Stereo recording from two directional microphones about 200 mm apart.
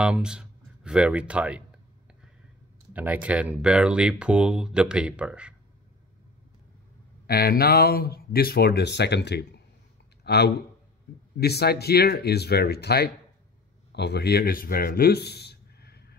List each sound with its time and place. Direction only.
0.0 s speech: 5° right (ahead or behind)
2.9 s speech: 10° right (ahead or behind)
7.2 s speech: 50° left (ahead or behind)